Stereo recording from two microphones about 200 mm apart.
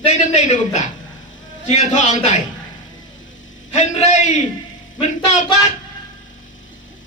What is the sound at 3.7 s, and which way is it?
A man's voice, 35° left (ahead or behind).